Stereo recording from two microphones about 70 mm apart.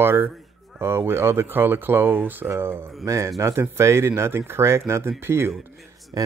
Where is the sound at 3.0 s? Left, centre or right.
Right.